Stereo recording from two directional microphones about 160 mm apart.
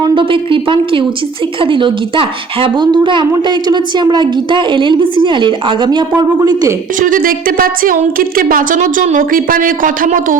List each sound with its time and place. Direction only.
0.0 s a woman's voice: 30° right (ahead or behind)
7.0 s speech: 60° right (ahead or behind)